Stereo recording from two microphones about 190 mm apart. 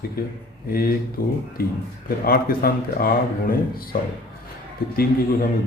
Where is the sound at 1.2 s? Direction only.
50° left (ahead or behind).